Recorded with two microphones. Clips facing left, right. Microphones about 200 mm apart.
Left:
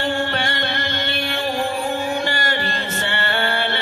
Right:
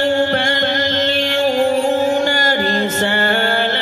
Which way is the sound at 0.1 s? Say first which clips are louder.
Right 7 dB; 45° right (ahead or behind).